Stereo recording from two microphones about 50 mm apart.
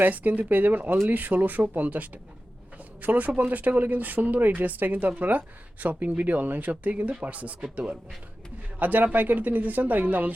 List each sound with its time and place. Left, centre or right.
0.0 s speech: right
8.8 s speech: right